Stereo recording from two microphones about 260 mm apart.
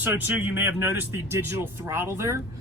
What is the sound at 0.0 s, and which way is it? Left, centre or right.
Speech, centre.